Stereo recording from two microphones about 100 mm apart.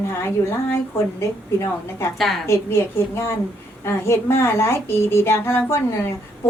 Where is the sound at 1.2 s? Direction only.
25° left (ahead or behind).